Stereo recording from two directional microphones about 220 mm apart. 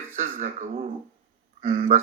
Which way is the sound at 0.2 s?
35° right (ahead or behind).